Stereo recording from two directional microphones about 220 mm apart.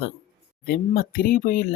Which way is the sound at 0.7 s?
40° left (ahead or behind).